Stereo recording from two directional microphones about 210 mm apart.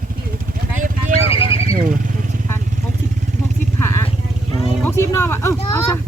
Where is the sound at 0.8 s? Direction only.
40° right (ahead or behind).